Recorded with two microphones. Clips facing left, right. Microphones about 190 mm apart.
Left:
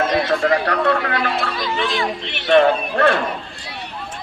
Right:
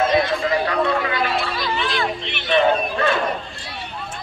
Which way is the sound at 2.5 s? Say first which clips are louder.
Left 4 dB; 65° left (ahead or behind).